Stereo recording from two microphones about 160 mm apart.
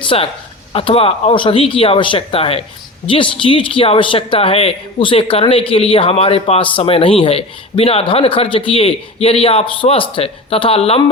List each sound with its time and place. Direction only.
0.0 s speech: 35° left (ahead or behind)